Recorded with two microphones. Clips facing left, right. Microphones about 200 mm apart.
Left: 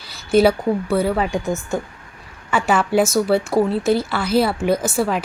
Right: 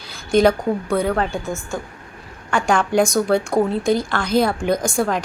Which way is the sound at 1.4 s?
20° left (ahead or behind).